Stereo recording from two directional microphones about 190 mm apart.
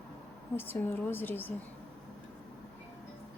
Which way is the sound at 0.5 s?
10° left (ahead or behind).